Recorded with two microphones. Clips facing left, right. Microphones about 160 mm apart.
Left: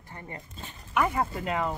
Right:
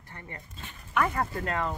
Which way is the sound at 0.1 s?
25° left (ahead or behind).